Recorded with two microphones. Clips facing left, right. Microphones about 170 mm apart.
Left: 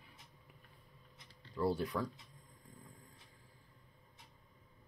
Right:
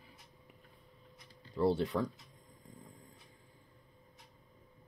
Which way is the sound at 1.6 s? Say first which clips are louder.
Right 4 dB; 25° right (ahead or behind).